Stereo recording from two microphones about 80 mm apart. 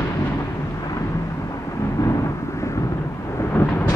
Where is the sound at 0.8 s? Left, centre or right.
Left.